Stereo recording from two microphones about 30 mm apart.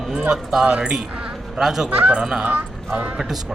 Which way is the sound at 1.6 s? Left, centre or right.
Centre.